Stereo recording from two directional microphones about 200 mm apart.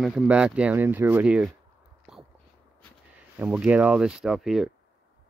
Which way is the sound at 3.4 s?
5° right (ahead or behind).